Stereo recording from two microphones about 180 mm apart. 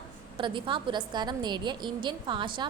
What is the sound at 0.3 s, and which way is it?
A woman's voice, 25° right (ahead or behind).